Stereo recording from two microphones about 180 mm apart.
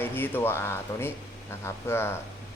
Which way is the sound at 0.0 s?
10° left (ahead or behind).